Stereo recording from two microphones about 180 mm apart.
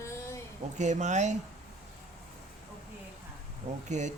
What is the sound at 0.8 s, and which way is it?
Speech, 40° right (ahead or behind).